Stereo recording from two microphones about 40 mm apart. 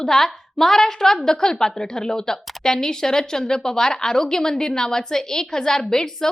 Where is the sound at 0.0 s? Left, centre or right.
Centre.